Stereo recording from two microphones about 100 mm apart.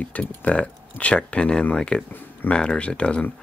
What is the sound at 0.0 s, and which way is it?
Speech, 15° left (ahead or behind).